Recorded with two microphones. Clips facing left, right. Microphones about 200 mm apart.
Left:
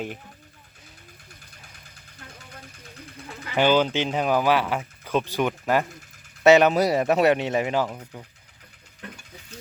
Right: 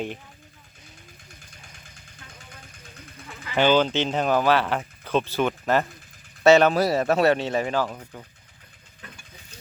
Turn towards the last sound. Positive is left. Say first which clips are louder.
# left 1 dB
turn(degrees=15)  # may be behind; listen again after turning